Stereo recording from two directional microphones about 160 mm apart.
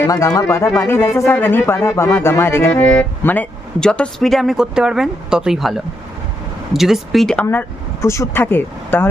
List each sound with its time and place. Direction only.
0.0 s speech: 20° left (ahead or behind); by 7.4 s centre (ahead or behind)
8.0 s speech: 15° left (ahead or behind)